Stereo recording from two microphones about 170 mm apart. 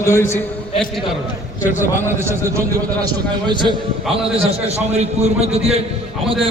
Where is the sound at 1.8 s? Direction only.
15° right (ahead or behind).